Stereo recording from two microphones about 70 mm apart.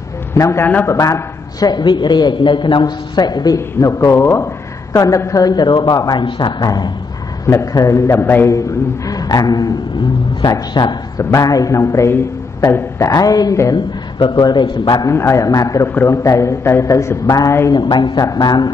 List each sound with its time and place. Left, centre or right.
0.3 s a man's voice: left
1.7 s a man's voice: left
3.5 s a man's voice: left
4.9 s speech: left
7.4 s a man's voice: left
10.4 s a man's voice: left
11.3 s a man's voice: left
13.1 s speech: left
14.1 s a man's voice: left
15.0 s a man's voice: left
17.3 s speech: left
17.7 s a man's voice: left
18.2 s speech: left